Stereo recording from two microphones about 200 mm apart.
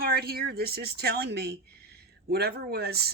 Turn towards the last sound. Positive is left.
turn(degrees=-50)  # may be behind; listen again after turning